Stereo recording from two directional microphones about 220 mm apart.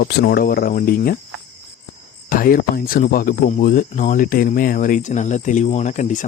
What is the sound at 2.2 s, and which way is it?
Speech, 40° left (ahead or behind).